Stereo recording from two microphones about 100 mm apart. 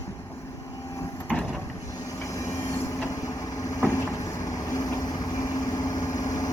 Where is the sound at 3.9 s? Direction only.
30° left (ahead or behind).